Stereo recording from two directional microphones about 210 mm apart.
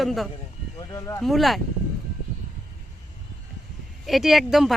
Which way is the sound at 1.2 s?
Centre (ahead or behind).